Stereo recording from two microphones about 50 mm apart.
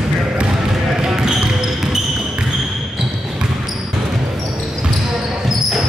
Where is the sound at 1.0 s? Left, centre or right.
Centre.